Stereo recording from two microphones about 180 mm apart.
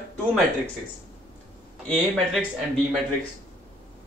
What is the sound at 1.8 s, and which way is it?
Speech, 5° left (ahead or behind).